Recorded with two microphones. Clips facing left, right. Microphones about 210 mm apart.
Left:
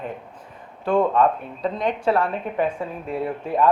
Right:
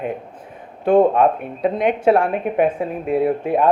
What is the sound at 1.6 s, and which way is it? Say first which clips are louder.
Speech: right 6 dB; 60° right (ahead or behind).